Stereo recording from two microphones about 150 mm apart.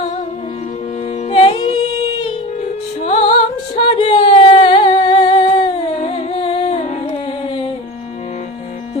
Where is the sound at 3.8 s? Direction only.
40° left (ahead or behind).